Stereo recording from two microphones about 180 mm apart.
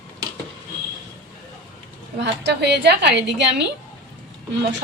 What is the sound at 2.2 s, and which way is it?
A woman's voice, 70° right (ahead or behind).